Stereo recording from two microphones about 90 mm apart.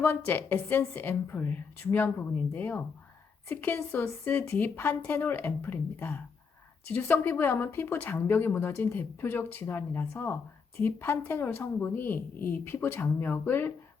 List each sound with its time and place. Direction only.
0.0 s speech: 25° left (ahead or behind)